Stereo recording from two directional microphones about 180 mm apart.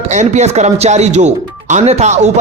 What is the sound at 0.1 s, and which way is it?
Speech, 40° right (ahead or behind).